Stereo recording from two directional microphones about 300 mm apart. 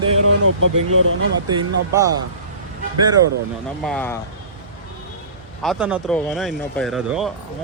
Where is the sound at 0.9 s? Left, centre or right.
Right.